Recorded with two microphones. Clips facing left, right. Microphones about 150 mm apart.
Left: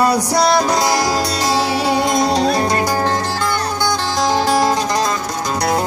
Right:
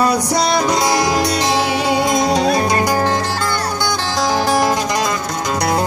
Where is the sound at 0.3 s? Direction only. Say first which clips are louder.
Left 1 dB; 20° right (ahead or behind).